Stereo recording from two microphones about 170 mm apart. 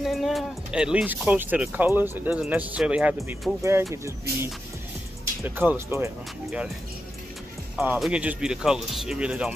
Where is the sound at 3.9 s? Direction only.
15° right (ahead or behind).